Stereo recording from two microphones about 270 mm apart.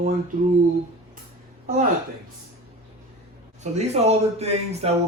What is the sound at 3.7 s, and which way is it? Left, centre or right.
Speech, right.